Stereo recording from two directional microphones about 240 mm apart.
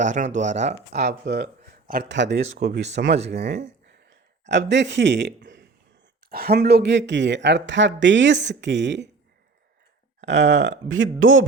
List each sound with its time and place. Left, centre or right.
0.0 s speech: right
1.0 s a man's voice: right
10.2 s speech: right